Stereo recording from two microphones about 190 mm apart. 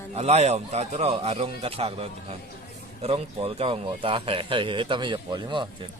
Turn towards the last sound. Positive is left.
turn(degrees=-25)  # may be behind; listen again after turning